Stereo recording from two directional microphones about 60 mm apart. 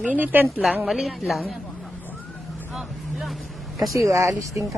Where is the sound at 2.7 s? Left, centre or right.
Centre.